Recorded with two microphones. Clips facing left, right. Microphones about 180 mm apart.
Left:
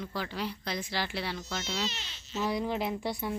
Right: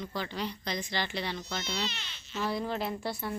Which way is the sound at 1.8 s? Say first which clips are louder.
Left 1 dB; 40° left (ahead or behind).